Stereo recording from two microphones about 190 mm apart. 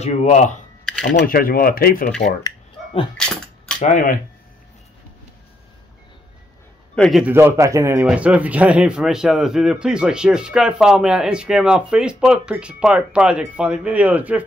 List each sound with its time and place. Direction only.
0.0 s speech: 35° left (ahead or behind)
1.1 s speech: 50° left (ahead or behind)
2.4 s music: 25° left (ahead or behind)
3.2 s a sound: 5° left (ahead or behind)
3.9 s speech: 45° left (ahead or behind)
7.0 s speech: centre (ahead or behind)
7.3 s speech: 15° right (ahead or behind)